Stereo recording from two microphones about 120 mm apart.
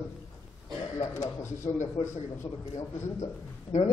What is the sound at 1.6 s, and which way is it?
Speech, 55° left (ahead or behind).